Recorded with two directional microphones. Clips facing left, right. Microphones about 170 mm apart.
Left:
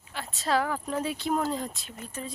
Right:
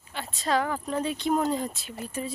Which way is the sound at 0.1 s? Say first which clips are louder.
Right 1 dB; centre (ahead or behind).